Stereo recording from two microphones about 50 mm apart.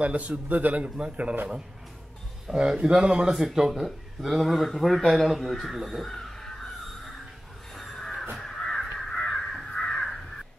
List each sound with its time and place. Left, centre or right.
0.0 s a man's voice: right
2.4 s speech: centre
3.3 s speech: centre
3.8 s a man's voice: centre
7.7 s a sound: centre
8.4 s crow: centre